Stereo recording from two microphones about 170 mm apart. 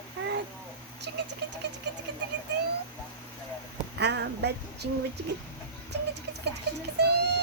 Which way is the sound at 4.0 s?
80° right.